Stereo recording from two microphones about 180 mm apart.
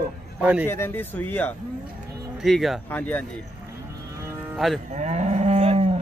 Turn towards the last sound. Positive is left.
turn(degrees=-35)  # may be behind; listen again after turning